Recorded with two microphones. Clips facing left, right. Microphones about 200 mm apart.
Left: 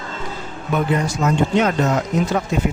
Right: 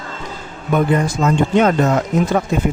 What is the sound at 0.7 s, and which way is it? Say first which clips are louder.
Speech: right 4 dB; 50° right (ahead or behind).